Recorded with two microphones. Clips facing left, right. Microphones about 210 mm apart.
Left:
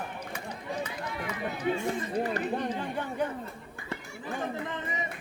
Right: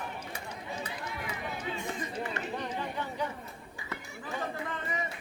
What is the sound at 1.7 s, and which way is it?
Speech, 55° left (ahead or behind).